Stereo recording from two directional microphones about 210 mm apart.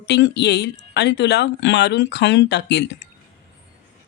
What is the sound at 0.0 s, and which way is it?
Speech, 55° left (ahead or behind).